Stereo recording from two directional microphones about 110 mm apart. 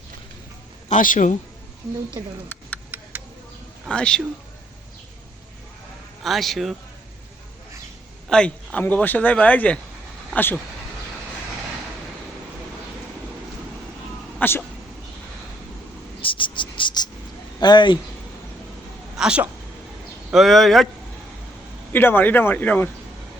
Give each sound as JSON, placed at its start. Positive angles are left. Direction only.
{"t": 0.9, "sound": "a man's voice", "side_deg": 90}
{"t": 2.2, "sound": "speech", "side_deg": -25}
{"t": 2.5, "sound": "a sound", "side_deg": 10}
{"t": 3.8, "sound": "speech", "side_deg": 10}
{"t": 6.2, "sound": "a man's voice", "side_deg": 0}
{"t": 8.3, "sound": "speech", "side_deg": 10}
{"t": 14.3, "sound": "speech", "side_deg": 20}
{"t": 16.2, "sound": "cricket", "side_deg": 50}
{"t": 17.6, "sound": "speech", "side_deg": 45}
{"t": 19.1, "sound": "a sound", "side_deg": -5}
{"t": 20.3, "sound": "a man's voice", "side_deg": 0}
{"t": 21.9, "sound": "speech", "side_deg": 20}